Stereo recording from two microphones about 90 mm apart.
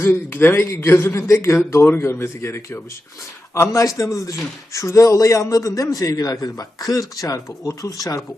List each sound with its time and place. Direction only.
0.0 s a man's voice: 20° left (ahead or behind); by 8.2 s 40° left (ahead or behind)